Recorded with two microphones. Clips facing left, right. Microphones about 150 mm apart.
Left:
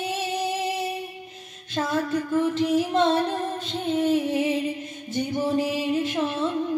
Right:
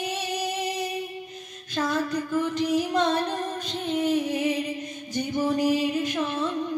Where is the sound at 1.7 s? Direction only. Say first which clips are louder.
Left 1 dB; 25° left (ahead or behind).